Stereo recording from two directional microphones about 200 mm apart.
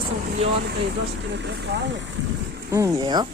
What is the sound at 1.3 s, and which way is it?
Speech, 60° right (ahead or behind).